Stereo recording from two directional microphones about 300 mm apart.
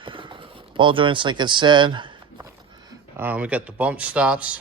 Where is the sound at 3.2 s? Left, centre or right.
Centre.